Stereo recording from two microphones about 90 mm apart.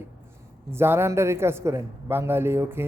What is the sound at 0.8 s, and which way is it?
A man's voice, 25° right (ahead or behind).